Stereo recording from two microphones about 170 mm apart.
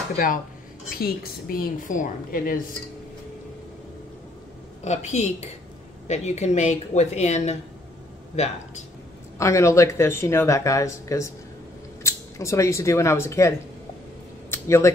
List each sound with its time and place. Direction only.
0.8 s a woman's voice: 60° left (ahead or behind)
4.8 s a woman's voice: 45° left (ahead or behind)
9.4 s speech: 15° left (ahead or behind)
14.5 s a sound: 15° left (ahead or behind)